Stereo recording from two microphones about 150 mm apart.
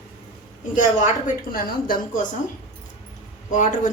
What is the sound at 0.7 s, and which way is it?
A woman's voice, 60° left (ahead or behind).